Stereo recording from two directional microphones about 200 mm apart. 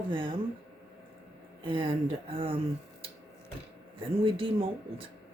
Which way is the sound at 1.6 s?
25° right (ahead or behind).